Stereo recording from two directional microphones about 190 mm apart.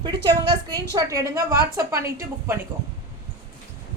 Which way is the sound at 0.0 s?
20° right (ahead or behind).